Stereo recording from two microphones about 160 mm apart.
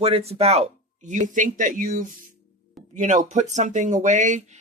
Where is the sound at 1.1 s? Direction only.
50° right (ahead or behind).